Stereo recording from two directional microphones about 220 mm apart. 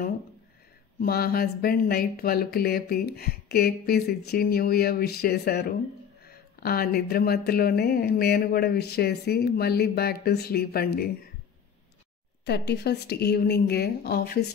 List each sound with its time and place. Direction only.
1.0 s speech: 45° left (ahead or behind)
12.4 s speech: 50° left (ahead or behind)